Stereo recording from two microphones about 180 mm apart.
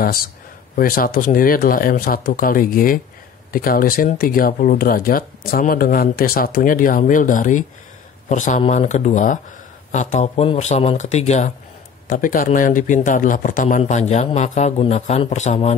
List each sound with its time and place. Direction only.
0.0 s speech: 55° left (ahead or behind); by 11.5 s 40° left (ahead or behind)
12.1 s speech: 50° left (ahead or behind)